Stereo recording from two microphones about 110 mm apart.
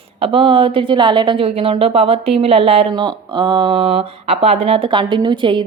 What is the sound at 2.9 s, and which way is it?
Speech, 45° right (ahead or behind).